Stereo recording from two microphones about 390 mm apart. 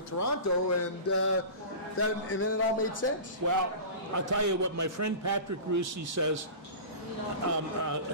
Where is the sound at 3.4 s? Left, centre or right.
Right.